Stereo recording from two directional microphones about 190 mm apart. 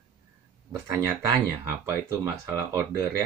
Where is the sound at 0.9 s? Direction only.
15° right (ahead or behind).